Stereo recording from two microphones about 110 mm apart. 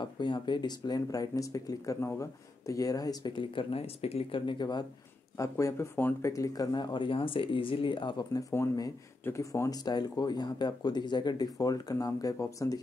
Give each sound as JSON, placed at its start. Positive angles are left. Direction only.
{"t": 0.0, "sound": "speech", "side_deg": 45}
{"t": 5.4, "sound": "speech", "side_deg": 30}